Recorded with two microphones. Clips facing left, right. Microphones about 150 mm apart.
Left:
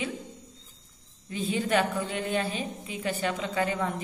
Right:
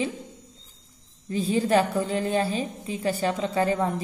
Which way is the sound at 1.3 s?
35° right (ahead or behind).